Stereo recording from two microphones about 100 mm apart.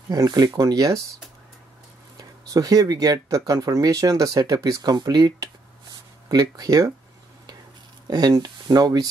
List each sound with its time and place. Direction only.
0.1 s speech: 40° right (ahead or behind)
2.1 s speech: 40° right (ahead or behind)
8.1 s speech: 40° right (ahead or behind)